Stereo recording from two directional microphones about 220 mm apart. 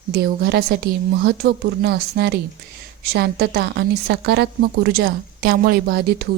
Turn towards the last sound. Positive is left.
turn(degrees=-45)  # may be behind; listen again after turning